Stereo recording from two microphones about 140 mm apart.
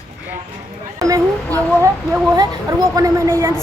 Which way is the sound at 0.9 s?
25° right (ahead or behind).